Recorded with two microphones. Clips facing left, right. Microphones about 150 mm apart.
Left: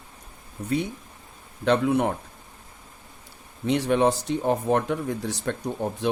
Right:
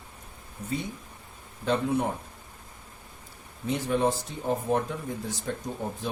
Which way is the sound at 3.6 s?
75° left (ahead or behind).